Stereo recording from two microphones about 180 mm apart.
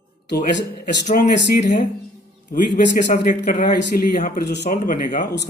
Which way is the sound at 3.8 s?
55° left (ahead or behind).